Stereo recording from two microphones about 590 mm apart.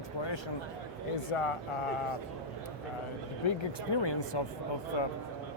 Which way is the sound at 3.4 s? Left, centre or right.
Left.